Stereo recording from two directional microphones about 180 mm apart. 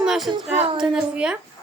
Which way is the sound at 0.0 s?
Centre (ahead or behind).